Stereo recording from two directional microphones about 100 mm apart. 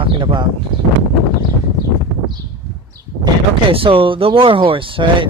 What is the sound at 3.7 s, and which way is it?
Speech, 65° right (ahead or behind).